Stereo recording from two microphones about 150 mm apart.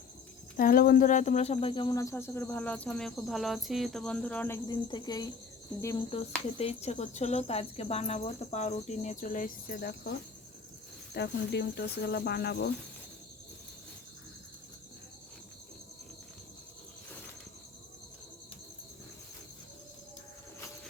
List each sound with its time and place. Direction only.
0.5 s speech: 70° left (ahead or behind); by 4.6 s 15° left (ahead or behind)
4.7 s speech: 30° left (ahead or behind)
6.6 s speech: 45° left (ahead or behind); by 12.7 s 90° left